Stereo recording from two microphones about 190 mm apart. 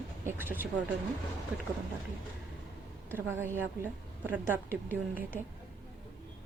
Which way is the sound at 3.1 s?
10° right (ahead or behind).